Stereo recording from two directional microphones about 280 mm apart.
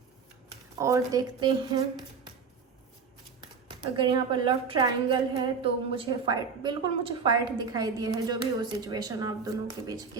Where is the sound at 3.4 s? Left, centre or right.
Centre.